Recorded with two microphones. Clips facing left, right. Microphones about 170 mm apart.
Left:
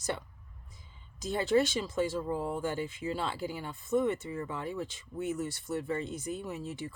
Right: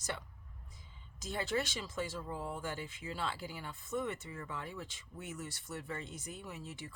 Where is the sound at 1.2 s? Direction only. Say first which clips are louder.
Left 9 dB; 25° left (ahead or behind).